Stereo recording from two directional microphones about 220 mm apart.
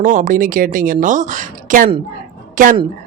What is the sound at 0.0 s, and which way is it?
Speech, 35° right (ahead or behind).